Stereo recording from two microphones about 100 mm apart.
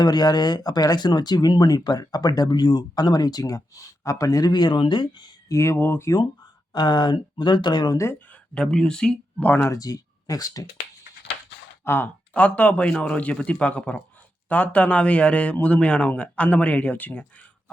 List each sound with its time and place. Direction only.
0.0 s speech: 45° left (ahead or behind)
5.5 s speech: 30° left (ahead or behind)
6.7 s speech: 50° left (ahead or behind)
8.5 s a man's voice: 5° left (ahead or behind)
9.6 s speech: 35° left (ahead or behind)
11.9 s a man's voice: 20° left (ahead or behind)